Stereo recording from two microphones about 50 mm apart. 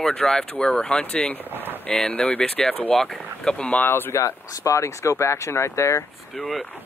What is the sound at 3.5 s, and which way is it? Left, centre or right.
Speech, left.